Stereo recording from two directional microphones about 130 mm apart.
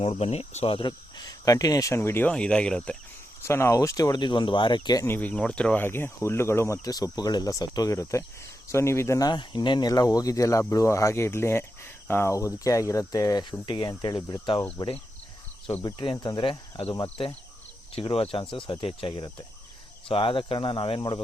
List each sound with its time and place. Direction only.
0.0 s speech: 50° left (ahead or behind); by 3.0 s 10° left (ahead or behind)
3.4 s speech: 20° left (ahead or behind)
5.0 s speech: 15° left (ahead or behind); by 14.6 s 35° left (ahead or behind)
15.8 s speech: 35° left (ahead or behind)